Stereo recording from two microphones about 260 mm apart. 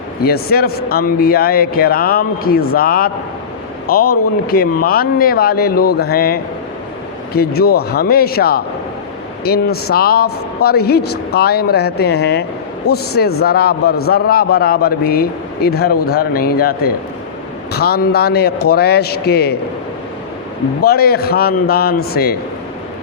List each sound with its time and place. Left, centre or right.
0.2 s a man's voice: left
20.8 s a man's voice: left